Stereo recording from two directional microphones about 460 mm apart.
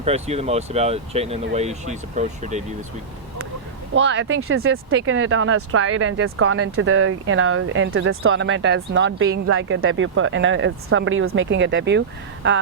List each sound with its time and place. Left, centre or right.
0.0 s speech: centre
3.9 s speech: right